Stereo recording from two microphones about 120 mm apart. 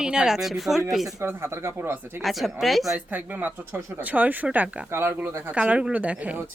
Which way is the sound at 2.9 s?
15° right (ahead or behind).